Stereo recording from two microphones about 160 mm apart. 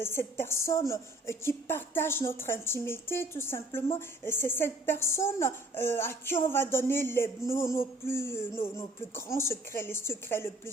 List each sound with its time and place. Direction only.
0.0 s a woman's voice: 15° left (ahead or behind)